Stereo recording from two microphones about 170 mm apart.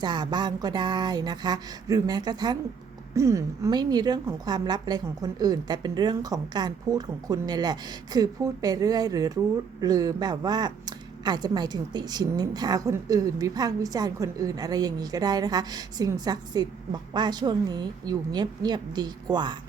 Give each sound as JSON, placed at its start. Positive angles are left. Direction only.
{"t": 0.0, "sound": "speech", "side_deg": -25}